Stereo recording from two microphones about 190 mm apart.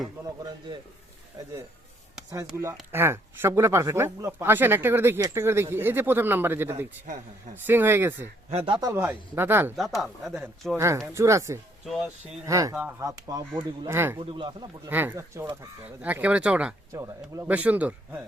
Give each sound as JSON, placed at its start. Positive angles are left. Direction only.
{"t": 1.4, "sound": "speech", "side_deg": -20}
{"t": 2.9, "sound": "speech", "side_deg": -10}
{"t": 8.4, "sound": "speech", "side_deg": -30}
{"t": 9.7, "sound": "speech", "side_deg": 0}
{"t": 10.8, "sound": "speech", "side_deg": -15}
{"t": 11.9, "sound": "speech", "side_deg": 0}
{"t": 12.5, "sound": "speech", "side_deg": -15}
{"t": 14.2, "sound": "speech", "side_deg": -25}
{"t": 14.8, "sound": "speech", "side_deg": -10}
{"t": 16.9, "sound": "speech", "side_deg": -15}